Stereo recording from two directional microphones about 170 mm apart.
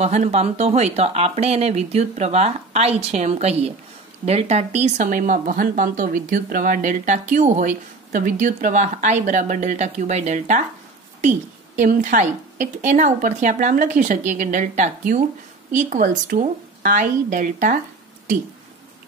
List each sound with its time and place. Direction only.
0.0 s speech: 40° right (ahead or behind)